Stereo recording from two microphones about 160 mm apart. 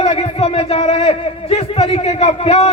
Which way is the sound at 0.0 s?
40° left (ahead or behind).